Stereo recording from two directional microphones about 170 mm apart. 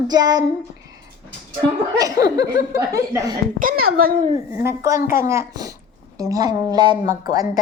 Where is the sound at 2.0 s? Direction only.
20° right (ahead or behind).